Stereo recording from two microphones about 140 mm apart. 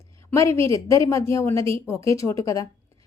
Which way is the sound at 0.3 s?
20° left (ahead or behind).